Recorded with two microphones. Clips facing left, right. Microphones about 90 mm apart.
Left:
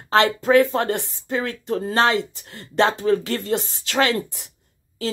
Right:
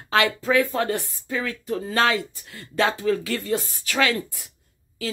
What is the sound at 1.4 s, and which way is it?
A woman's voice, 40° left (ahead or behind).